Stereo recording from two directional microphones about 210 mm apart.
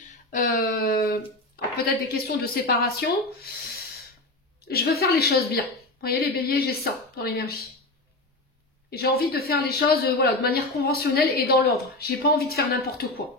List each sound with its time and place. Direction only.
0.1 s a sound: 40° left (ahead or behind)
2.1 s speech: 45° left (ahead or behind)
8.9 s speech: 50° left (ahead or behind)